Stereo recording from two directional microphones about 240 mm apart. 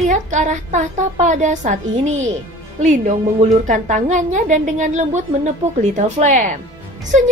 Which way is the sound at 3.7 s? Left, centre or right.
Right.